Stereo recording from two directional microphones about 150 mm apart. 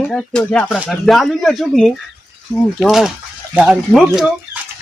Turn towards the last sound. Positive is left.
turn(degrees=0)  # may be behind; listen again after turning